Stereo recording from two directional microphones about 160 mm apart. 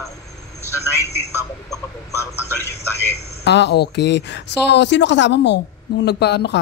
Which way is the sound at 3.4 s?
90° left.